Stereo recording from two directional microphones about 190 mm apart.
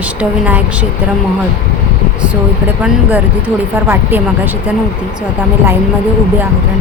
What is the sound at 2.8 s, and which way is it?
Speech, 10° right (ahead or behind).